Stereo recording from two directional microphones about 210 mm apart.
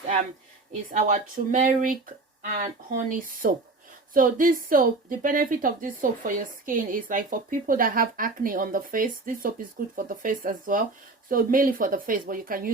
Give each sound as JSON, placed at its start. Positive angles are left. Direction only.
{"t": 0.7, "sound": "a woman's voice", "side_deg": -35}